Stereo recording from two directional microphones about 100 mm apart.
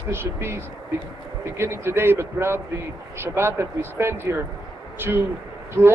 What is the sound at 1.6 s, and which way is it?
A man's voice, 25° right (ahead or behind).